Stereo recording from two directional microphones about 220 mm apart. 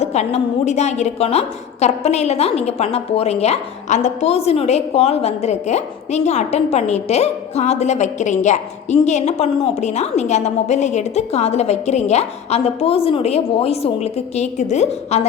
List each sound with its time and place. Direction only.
0.0 s a woman's voice: 30° left (ahead or behind)